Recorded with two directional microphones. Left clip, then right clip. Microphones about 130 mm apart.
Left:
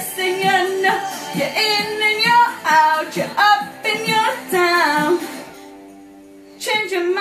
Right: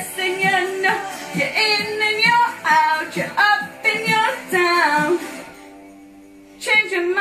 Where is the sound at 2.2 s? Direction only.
15° left (ahead or behind).